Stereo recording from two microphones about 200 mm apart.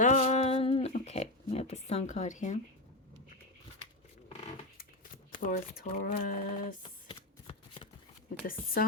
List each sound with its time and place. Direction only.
0.0 s a sound: 35° left (ahead or behind)
5.3 s speech: 40° left (ahead or behind)
6.8 s shuffling cards: 25° left (ahead or behind)